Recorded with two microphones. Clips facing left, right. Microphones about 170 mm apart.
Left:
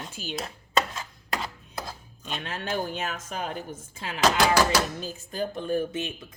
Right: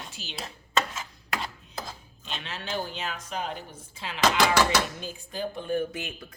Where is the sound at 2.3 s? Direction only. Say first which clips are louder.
Left 3 dB; 50° left (ahead or behind).